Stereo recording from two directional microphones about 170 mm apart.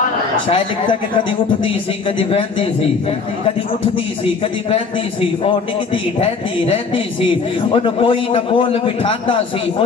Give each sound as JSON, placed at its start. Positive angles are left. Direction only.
{"t": 1.6, "sound": "a man's voice", "side_deg": 30}
{"t": 6.1, "sound": "a man's voice", "side_deg": 35}